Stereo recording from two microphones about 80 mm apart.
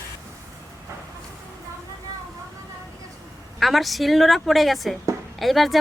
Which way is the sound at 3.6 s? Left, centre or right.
Centre.